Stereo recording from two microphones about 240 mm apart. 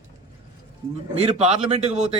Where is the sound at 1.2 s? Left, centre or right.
Right.